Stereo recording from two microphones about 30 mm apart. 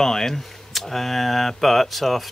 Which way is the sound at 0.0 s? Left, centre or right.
Centre.